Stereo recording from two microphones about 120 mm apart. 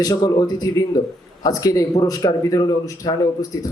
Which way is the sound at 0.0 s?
30° left (ahead or behind).